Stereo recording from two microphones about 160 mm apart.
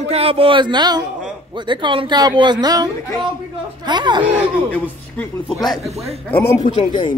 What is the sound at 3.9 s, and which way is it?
Speech, 30° right (ahead or behind).